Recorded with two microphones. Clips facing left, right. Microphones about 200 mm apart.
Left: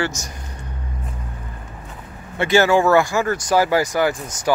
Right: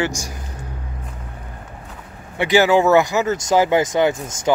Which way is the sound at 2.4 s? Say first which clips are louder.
Right 1 dB; 15° right (ahead or behind).